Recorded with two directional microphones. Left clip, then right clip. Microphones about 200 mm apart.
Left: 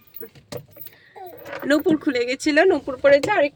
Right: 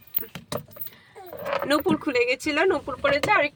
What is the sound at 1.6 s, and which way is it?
Speech, 10° left (ahead or behind).